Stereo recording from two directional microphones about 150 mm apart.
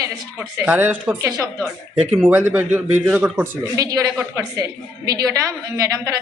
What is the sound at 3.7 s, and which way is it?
A woman's voice, 25° right (ahead or behind).